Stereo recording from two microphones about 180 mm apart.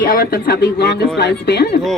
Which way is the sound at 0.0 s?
55° left (ahead or behind).